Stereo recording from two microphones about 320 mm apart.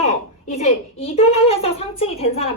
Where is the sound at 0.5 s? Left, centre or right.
Centre.